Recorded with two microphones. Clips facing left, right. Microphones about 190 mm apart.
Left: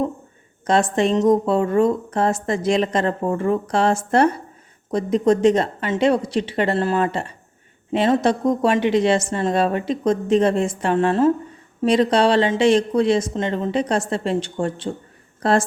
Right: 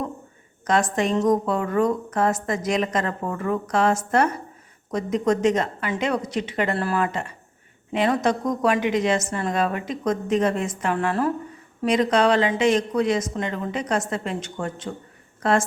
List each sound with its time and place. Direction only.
0.7 s a woman's voice: 25° left (ahead or behind)